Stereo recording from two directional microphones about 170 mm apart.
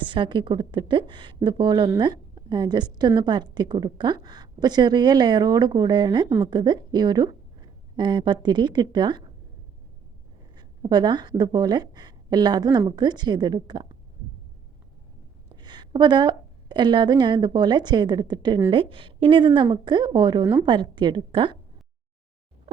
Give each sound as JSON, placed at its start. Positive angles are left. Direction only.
{"t": 0.0, "sound": "a woman's voice", "side_deg": -30}
{"t": 10.5, "sound": "a woman's voice", "side_deg": -25}
{"t": 15.6, "sound": "a woman's voice", "side_deg": -25}